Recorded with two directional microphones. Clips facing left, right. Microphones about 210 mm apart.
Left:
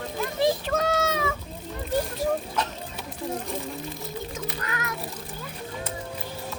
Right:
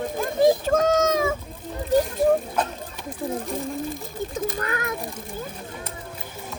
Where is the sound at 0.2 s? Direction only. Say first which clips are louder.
Right 5 dB; 45° right (ahead or behind).